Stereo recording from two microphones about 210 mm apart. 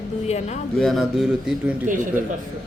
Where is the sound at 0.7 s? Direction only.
Centre (ahead or behind).